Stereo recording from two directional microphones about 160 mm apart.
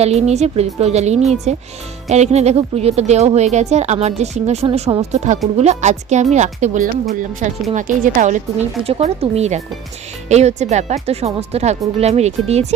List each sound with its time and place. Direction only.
0.0 s a woman's voice: 40° right (ahead or behind)
8.8 s a woman's voice: 40° right (ahead or behind)